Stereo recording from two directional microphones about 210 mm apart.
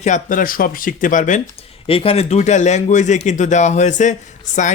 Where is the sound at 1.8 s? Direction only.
25° left (ahead or behind).